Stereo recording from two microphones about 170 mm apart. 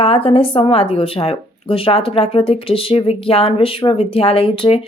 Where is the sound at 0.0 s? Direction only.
35° left (ahead or behind).